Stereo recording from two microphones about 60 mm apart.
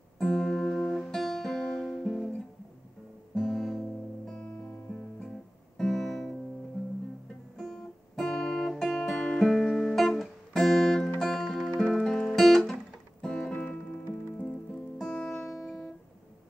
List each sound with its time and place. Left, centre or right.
0.2 s music: centre
4.4 s music: centre
4.9 s guitar: centre
7.5 s guitar: centre
7.8 s guitar: centre
9.1 s music: left
9.4 s guitar: centre
13.2 s music: centre